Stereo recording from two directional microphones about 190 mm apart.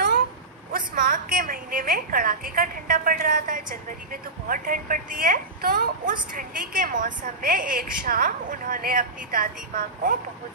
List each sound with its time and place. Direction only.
0.7 s a woman's voice: 45° right (ahead or behind)